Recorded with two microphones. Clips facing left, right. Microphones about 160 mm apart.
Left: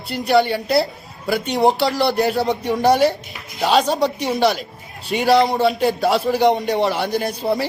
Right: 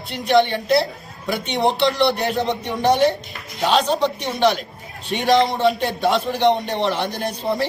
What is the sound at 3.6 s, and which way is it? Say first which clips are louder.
Speech: left 1 dB; 40° left (ahead or behind).